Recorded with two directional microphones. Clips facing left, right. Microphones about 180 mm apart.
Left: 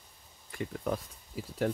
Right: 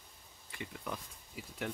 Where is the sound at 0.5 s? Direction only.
45° left (ahead or behind).